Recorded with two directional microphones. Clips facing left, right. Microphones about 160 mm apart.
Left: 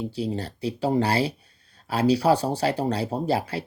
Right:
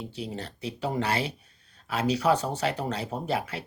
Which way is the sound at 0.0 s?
35° left (ahead or behind).